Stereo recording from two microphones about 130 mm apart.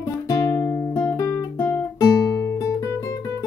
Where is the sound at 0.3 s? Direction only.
25° left (ahead or behind).